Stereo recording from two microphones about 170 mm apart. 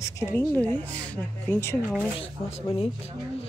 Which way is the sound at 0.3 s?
15° left (ahead or behind).